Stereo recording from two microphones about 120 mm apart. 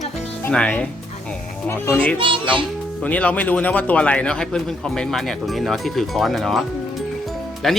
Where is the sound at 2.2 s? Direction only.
45° right (ahead or behind).